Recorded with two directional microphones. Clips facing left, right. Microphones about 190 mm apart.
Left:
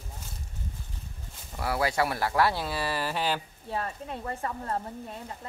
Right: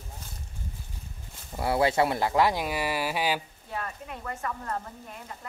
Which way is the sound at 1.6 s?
25° right (ahead or behind).